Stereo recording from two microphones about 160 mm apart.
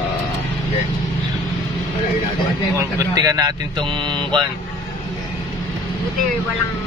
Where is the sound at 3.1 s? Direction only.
20° right (ahead or behind).